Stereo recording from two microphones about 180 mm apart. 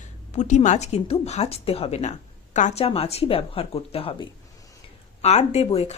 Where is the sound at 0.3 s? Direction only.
40° left (ahead or behind).